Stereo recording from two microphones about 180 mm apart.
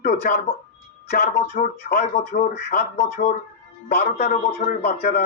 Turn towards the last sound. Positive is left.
turn(degrees=55)  # may be behind; listen again after turning